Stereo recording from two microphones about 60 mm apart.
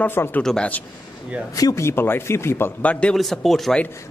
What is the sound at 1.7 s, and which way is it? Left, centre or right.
Speech, left.